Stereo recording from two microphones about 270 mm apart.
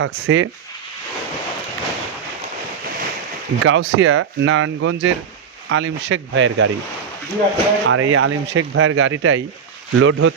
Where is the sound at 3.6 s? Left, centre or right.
Right.